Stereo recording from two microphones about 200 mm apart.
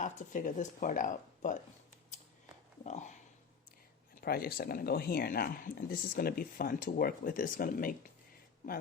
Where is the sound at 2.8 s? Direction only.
35° left (ahead or behind).